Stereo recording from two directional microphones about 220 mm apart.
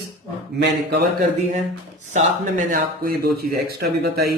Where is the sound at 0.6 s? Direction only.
50° right (ahead or behind).